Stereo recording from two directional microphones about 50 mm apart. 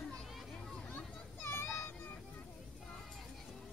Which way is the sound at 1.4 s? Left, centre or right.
Left.